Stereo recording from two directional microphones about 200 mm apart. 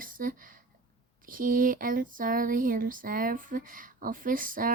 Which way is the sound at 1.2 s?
45° right (ahead or behind).